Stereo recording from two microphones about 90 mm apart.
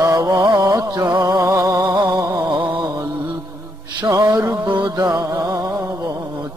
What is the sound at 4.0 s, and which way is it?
Mantra, 40° right (ahead or behind).